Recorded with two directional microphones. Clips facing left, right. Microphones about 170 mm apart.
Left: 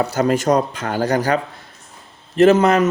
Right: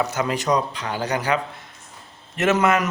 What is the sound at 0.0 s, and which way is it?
A man's voice, 40° left (ahead or behind).